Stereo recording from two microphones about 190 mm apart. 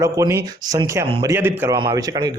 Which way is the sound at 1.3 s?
10° right (ahead or behind).